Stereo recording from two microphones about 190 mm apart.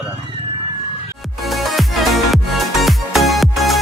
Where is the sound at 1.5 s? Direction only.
Centre (ahead or behind).